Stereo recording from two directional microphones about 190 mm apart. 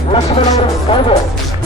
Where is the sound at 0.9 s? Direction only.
25° left (ahead or behind).